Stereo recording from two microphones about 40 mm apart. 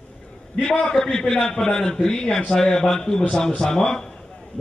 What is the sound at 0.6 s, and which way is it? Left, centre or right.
A man's voice, centre.